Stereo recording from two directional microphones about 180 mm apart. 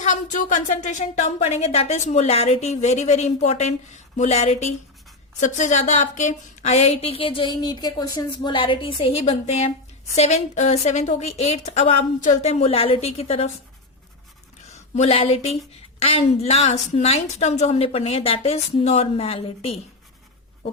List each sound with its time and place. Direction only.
0.0 s speech: 45° left (ahead or behind)
14.7 s a woman's voice: 40° left (ahead or behind)